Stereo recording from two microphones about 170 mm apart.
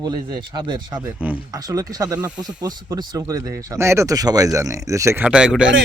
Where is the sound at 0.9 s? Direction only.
10° right (ahead or behind).